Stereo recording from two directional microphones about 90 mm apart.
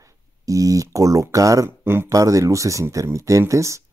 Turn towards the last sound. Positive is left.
turn(degrees=-35)  # may be behind; listen again after turning